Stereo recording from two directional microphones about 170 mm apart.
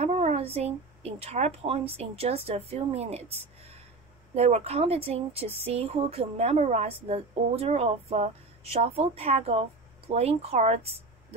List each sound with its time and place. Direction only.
0.0 s speech: 40° right (ahead or behind)
4.4 s speech: 40° right (ahead or behind)